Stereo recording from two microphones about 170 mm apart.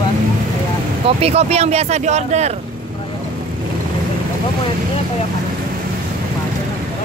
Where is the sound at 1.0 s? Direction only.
35° right (ahead or behind).